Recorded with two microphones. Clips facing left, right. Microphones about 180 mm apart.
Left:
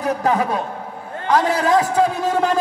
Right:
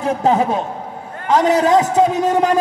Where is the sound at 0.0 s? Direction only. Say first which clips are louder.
Right 3 dB; 25° right (ahead or behind).